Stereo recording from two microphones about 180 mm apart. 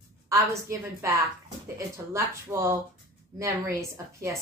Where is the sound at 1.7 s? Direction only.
15° right (ahead or behind).